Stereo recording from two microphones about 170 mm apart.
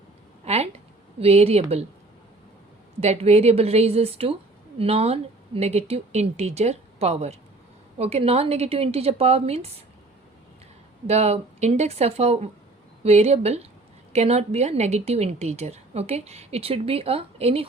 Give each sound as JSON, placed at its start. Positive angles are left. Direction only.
{"t": 0.4, "sound": "a sound", "side_deg": -40}
{"t": 1.2, "sound": "a woman's voice", "side_deg": -35}
{"t": 3.0, "sound": "a woman's voice", "side_deg": -40}
{"t": 11.0, "sound": "a woman's voice", "side_deg": -40}